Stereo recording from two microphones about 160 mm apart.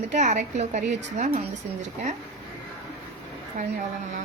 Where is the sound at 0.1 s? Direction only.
50° right (ahead or behind).